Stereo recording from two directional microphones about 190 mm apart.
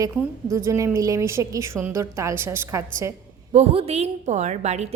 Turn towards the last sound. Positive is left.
turn(degrees=-35)  # may be behind; listen again after turning